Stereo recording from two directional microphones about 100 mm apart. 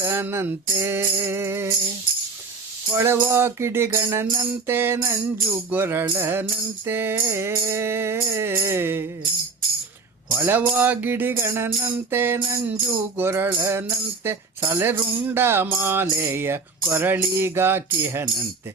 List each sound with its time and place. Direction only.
0.0 s music: 25° right (ahead or behind)
3.0 s music: 25° right (ahead or behind)
10.3 s music: 20° right (ahead or behind)